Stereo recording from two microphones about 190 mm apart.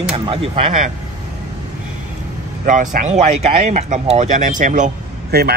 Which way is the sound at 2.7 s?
45° right (ahead or behind).